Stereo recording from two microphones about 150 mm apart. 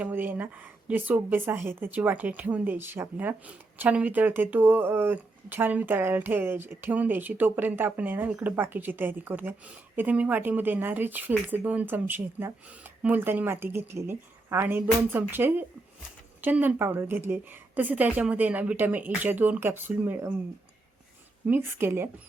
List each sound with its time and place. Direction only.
0.0 s a woman's voice: 15° right (ahead or behind)
21.4 s a woman's voice: 15° right (ahead or behind)